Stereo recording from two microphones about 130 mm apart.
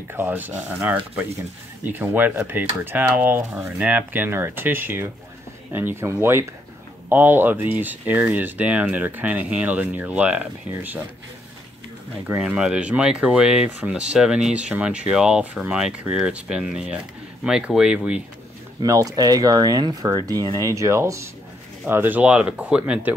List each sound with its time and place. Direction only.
0.1 s speech: 15° right (ahead or behind)
1.9 s speech: 15° right (ahead or behind)
12.3 s speech: 10° right (ahead or behind)
18.8 s speech: 25° right (ahead or behind); by 23.1 s 10° right (ahead or behind)